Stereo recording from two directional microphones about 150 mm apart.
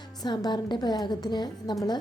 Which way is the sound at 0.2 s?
30° left (ahead or behind).